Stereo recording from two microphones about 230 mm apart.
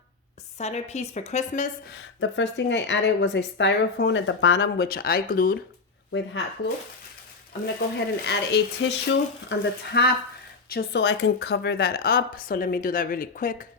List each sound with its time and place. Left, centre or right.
0.6 s a woman's voice: left
2.2 s speech: left
6.1 s speech: left
7.9 s speech: left